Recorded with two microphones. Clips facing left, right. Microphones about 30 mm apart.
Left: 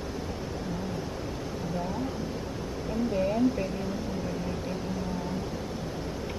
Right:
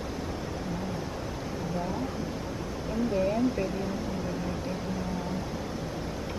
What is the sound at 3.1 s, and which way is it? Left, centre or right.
Speech, centre.